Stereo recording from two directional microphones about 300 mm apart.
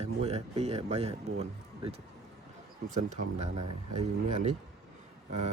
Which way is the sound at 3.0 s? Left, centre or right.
Right.